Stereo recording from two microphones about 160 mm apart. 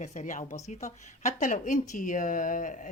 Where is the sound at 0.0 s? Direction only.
50° left (ahead or behind).